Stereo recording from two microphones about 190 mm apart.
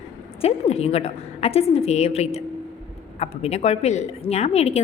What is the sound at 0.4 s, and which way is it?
A woman's voice, 35° left (ahead or behind).